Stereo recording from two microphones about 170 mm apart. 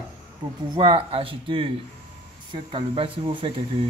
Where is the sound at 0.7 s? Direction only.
30° right (ahead or behind).